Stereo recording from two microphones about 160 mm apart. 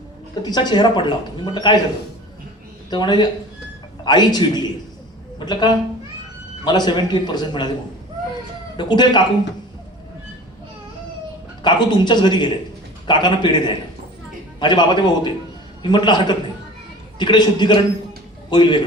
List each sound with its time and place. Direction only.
0.4 s speech: 25° left (ahead or behind)
2.9 s speech: 25° left (ahead or behind)
8.8 s speech: 30° left (ahead or behind)
11.6 s speech: 30° left (ahead or behind)
14.6 s speech: 30° left (ahead or behind)